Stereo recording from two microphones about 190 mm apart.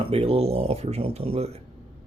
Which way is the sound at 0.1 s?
30° right (ahead or behind).